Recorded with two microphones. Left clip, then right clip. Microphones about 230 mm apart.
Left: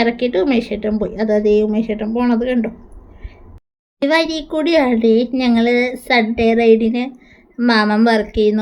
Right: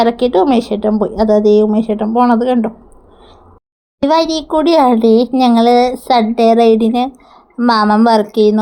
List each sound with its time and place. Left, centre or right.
0.0 s a child's voice: centre
4.0 s a child's voice: centre